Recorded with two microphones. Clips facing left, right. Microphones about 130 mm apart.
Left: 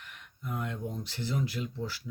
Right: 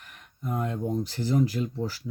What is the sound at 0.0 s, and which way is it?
Speech, 40° right (ahead or behind).